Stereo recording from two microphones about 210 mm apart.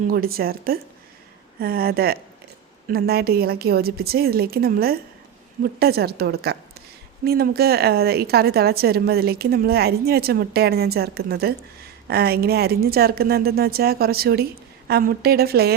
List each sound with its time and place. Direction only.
0.1 s a woman's voice: 45° right (ahead or behind)